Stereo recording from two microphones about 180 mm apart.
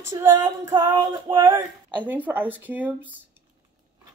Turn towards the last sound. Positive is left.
turn(degrees=-10)  # may be behind; listen again after turning